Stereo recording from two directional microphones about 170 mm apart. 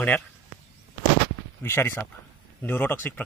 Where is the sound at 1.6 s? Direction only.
15° left (ahead or behind).